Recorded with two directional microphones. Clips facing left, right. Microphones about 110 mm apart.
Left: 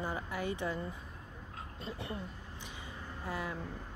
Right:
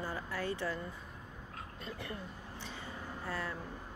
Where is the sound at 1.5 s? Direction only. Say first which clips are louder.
Left 2 dB; 25° left (ahead or behind).